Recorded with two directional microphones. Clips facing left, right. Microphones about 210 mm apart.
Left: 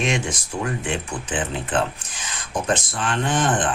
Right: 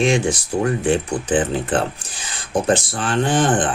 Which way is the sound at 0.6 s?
40° right (ahead or behind).